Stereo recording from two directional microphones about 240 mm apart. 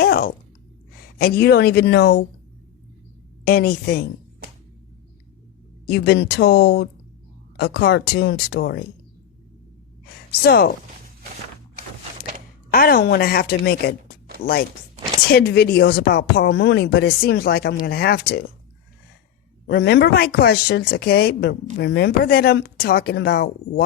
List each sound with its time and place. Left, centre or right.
0.0 s speech: left
3.4 s speech: left
5.9 s speech: left
10.3 s speech: left
12.7 s speech: left
15.3 s speech: left
19.6 s speech: left